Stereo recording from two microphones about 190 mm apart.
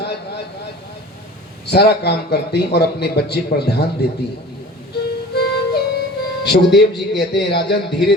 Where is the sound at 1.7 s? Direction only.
60° left (ahead or behind).